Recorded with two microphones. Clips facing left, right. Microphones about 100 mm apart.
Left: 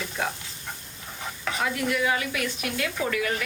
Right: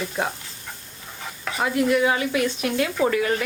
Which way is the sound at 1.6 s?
30° right (ahead or behind).